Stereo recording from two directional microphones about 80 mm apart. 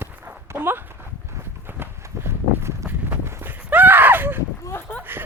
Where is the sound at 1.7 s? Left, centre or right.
Right.